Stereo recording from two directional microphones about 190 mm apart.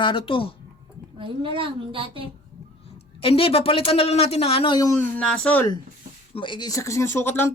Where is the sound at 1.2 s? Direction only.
25° right (ahead or behind).